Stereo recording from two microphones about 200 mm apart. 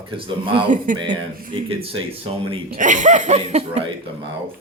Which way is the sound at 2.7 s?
40° right (ahead or behind).